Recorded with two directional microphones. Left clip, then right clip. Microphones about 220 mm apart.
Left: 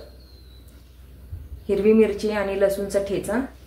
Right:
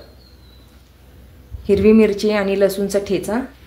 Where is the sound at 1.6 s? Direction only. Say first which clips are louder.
Right 5 dB; 40° right (ahead or behind).